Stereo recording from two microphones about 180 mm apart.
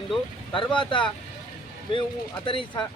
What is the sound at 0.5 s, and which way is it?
Speech, 30° left (ahead or behind).